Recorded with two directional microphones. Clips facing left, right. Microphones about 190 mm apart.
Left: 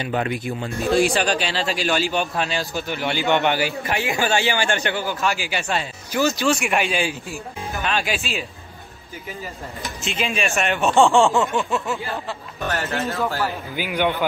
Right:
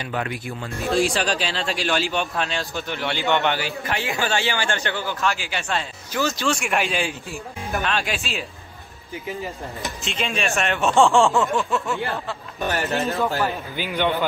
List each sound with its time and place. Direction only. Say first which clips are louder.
0.0 s speech: left 4 dB; 25° left (ahead or behind)
0.9 s a man's voice: left 2 dB; centre (ahead or behind)
10.0 s a man's voice: left 2 dB; centre (ahead or behind)
12.6 s speech: right 1 dB; 15° right (ahead or behind)
13.7 s a man's voice: left 2 dB; 10° left (ahead or behind)